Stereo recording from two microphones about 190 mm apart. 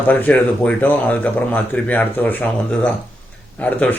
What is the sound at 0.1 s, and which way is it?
Speech, 10° left (ahead or behind).